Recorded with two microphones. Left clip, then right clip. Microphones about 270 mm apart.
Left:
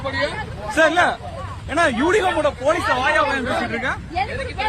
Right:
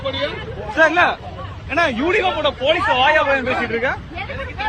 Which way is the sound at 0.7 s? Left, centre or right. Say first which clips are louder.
Right 2 dB; left.